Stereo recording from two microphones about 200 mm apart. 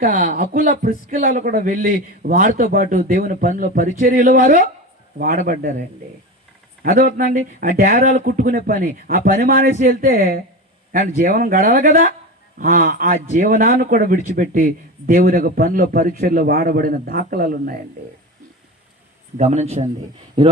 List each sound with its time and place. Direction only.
0.0 s speech: 40° right (ahead or behind)
7.2 s speech: 40° right (ahead or behind)
19.4 s speech: 35° right (ahead or behind)